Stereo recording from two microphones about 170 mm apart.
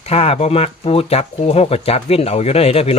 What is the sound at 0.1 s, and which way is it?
Speech, 35° left (ahead or behind).